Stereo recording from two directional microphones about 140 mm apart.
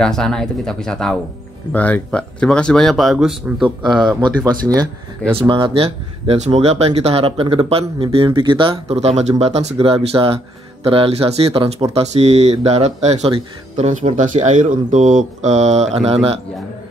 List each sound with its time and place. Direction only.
0.0 s speech: 5° left (ahead or behind)
5.3 s speech: 40° right (ahead or behind)